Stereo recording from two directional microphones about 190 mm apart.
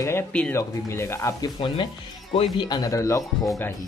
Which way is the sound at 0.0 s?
10° left (ahead or behind).